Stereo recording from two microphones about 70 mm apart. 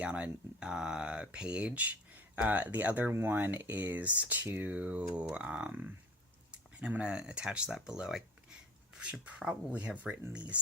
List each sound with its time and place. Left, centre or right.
0.0 s speech: centre
3.1 s speech: right; by 8.2 s centre
9.2 s speech: centre